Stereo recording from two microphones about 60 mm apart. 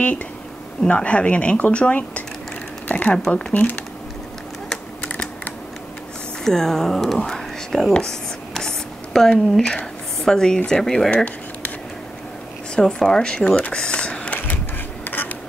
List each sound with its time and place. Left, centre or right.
0.8 s speech: centre
3.3 s speech: centre
6.4 s speech: centre
7.2 s whispering: centre
7.9 s writing: centre
9.3 s speech: centre
12.7 s speech: centre
15.0 s duck: left